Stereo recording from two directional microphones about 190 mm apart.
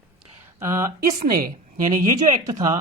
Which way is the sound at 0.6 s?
15° right (ahead or behind).